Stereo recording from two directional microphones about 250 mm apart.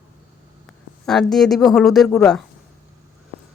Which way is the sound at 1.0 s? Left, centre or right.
Centre.